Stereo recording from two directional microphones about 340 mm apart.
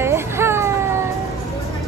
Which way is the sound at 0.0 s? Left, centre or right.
Centre.